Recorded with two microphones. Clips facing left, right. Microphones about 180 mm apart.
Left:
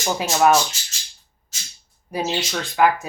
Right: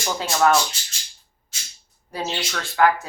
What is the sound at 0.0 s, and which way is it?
Speech, 20° left (ahead or behind).